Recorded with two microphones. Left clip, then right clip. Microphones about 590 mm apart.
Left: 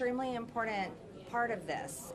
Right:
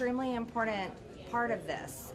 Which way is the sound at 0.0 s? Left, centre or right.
Right.